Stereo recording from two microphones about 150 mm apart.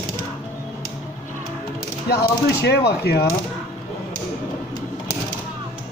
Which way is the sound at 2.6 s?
90° left.